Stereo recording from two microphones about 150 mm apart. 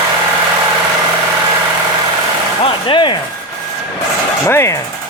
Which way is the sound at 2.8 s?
30° left (ahead or behind).